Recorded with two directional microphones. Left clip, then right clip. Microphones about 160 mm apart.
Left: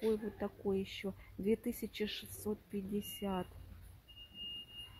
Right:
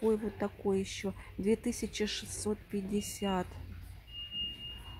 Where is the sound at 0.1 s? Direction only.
5° right (ahead or behind).